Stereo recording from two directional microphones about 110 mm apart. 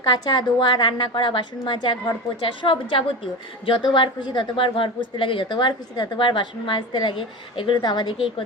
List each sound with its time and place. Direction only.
0.0 s a woman's voice: 40° left (ahead or behind)